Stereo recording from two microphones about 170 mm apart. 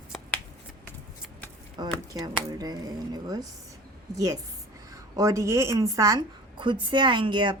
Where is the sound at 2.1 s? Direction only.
25° right (ahead or behind).